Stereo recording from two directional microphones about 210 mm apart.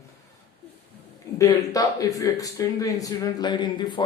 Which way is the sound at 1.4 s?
15° left (ahead or behind).